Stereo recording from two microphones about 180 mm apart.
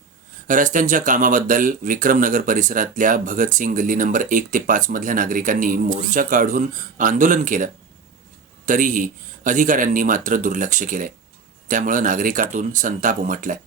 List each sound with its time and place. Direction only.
0.4 s speech: 45° right (ahead or behind)